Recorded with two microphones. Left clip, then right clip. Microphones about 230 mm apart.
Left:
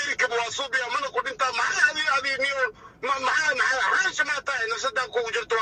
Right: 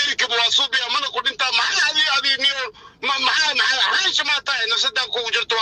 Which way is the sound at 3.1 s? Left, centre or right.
Right.